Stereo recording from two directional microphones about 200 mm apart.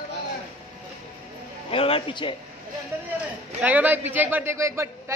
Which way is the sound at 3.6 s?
10° right (ahead or behind).